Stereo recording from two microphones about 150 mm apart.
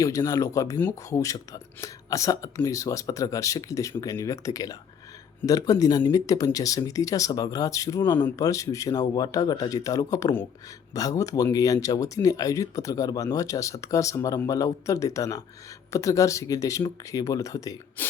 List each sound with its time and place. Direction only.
0.0 s speech: 20° left (ahead or behind)
18.0 s gasp: 10° left (ahead or behind)